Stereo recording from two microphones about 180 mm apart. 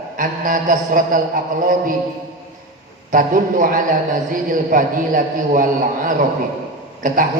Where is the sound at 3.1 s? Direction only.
50° right (ahead or behind).